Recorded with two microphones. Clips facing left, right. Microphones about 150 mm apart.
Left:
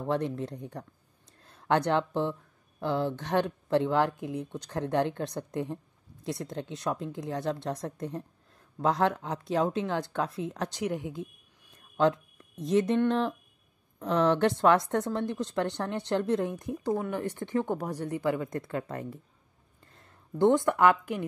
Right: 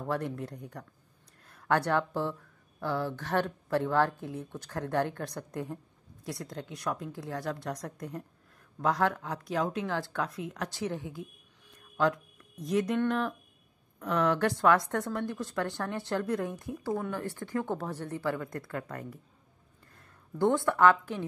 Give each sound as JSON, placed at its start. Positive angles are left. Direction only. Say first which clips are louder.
{"t": 0.0, "sound": "a woman's voice", "louder": "left 3 dB", "side_deg": 20}
{"t": 10.8, "sound": "a woman's voice", "louder": "left 3 dB", "side_deg": 15}